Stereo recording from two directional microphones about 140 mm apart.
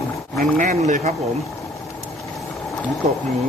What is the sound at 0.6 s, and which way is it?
Speech, 65° right (ahead or behind).